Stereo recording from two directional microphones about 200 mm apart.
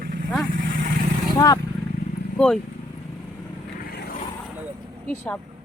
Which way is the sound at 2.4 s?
5° left (ahead or behind).